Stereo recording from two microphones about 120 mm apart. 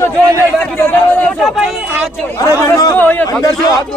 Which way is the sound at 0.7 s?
15° left (ahead or behind).